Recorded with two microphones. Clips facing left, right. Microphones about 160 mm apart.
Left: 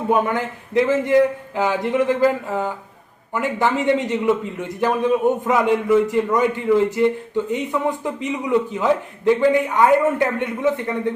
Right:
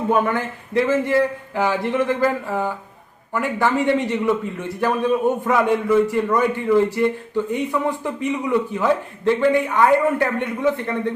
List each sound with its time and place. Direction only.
0.1 s a man's voice: 15° left (ahead or behind)